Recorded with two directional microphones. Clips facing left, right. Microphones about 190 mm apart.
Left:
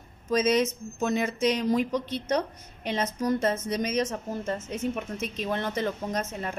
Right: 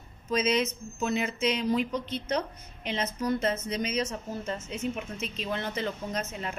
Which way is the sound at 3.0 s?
45° left (ahead or behind).